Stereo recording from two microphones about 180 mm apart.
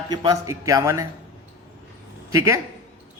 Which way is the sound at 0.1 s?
20° right (ahead or behind).